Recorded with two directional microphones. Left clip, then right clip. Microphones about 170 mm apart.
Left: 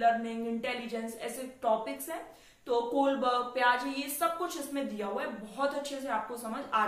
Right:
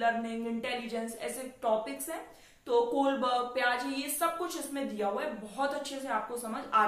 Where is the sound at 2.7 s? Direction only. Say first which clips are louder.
Right 1 dB; 10° right (ahead or behind).